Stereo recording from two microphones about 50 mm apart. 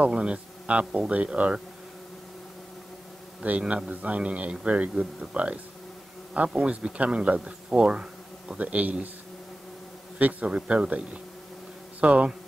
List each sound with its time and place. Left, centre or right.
0.1 s speech: right
3.4 s speech: right
8.5 s a man's voice: right
10.1 s speech: right
12.0 s speech: right